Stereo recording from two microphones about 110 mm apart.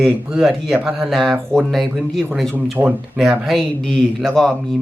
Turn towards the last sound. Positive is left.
turn(degrees=0)  # may be behind; listen again after turning